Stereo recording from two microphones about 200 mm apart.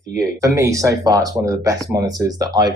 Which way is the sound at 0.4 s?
15° right (ahead or behind).